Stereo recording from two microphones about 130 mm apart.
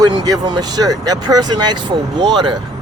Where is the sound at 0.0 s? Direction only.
35° right (ahead or behind).